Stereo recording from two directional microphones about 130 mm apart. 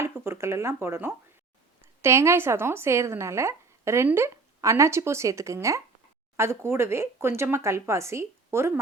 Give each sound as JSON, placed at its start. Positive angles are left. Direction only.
{"t": 0.0, "sound": "a woman's voice", "side_deg": -20}